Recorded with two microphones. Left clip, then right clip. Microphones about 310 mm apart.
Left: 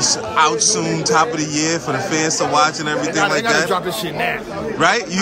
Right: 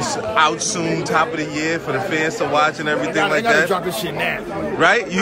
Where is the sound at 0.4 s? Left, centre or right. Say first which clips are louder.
Left 2 dB; centre.